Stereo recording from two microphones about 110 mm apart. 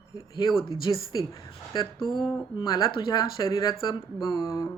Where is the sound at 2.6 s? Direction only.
35° left (ahead or behind).